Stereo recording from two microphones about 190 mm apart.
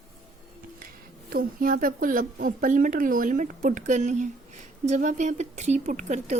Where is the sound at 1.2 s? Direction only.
50° right (ahead or behind).